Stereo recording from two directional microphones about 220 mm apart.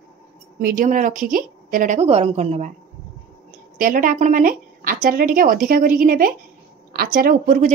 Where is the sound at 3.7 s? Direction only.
40° right (ahead or behind).